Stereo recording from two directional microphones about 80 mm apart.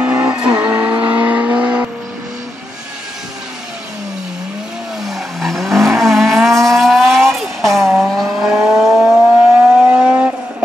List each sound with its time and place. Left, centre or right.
0.0 s vehicle: right
5.0 s vehicle: centre